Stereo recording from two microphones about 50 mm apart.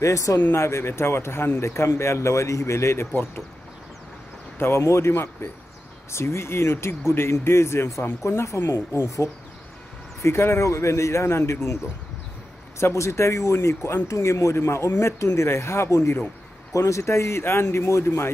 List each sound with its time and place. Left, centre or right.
0.0 s speech: left
0.4 s speech: left
0.7 s speech: left
4.6 s speech: left
6.1 s speech: left
8.2 s speech: left
12.7 s speech: left
16.7 s speech: left
17.0 s speech: left